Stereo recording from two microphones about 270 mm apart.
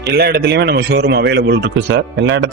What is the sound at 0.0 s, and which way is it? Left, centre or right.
Speech, right.